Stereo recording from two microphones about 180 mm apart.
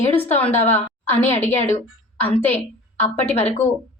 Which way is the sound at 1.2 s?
40° left (ahead or behind).